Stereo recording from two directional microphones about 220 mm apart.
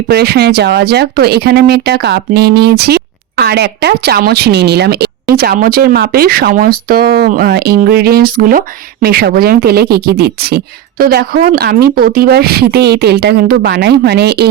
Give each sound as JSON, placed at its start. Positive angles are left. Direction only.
{"t": 0.1, "sound": "speech", "side_deg": -45}